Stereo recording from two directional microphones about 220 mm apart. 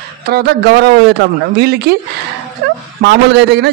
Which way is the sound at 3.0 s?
50° right (ahead or behind).